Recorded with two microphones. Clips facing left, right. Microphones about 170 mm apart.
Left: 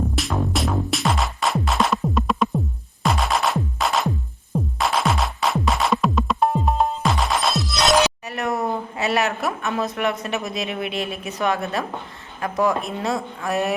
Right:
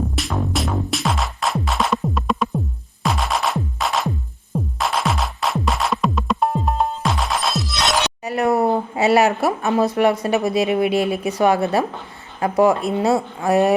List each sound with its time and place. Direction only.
0.2 s music: centre (ahead or behind)
8.3 s a woman's voice: 30° right (ahead or behind)